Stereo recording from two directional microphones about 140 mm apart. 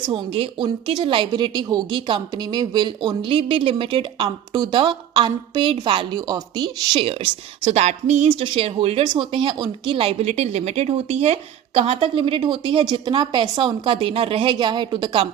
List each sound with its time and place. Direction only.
0.1 s a woman's voice: 40° right (ahead or behind)
7.1 s a woman's voice: 40° right (ahead or behind)